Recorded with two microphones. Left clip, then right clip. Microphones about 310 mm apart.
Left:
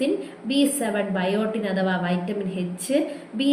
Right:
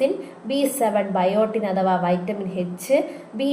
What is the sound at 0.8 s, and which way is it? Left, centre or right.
A woman's voice, right.